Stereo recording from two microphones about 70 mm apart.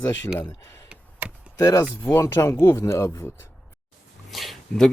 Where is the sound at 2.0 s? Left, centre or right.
Left.